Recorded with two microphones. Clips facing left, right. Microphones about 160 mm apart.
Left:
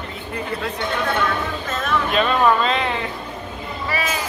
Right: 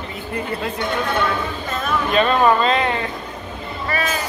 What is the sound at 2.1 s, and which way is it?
Speech, centre (ahead or behind).